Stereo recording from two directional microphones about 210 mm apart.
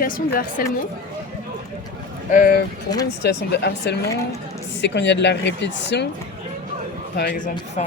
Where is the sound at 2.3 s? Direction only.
45° left (ahead or behind).